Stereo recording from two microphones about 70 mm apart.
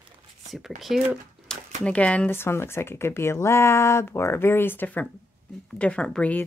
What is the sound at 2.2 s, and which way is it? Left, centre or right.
Speech, left.